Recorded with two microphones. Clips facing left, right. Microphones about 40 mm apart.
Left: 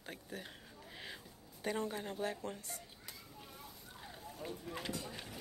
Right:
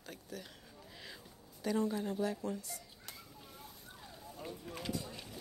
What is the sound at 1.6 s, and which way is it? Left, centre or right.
Speech, left.